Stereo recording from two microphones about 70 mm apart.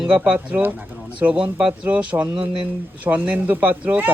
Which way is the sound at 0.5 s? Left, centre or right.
Right.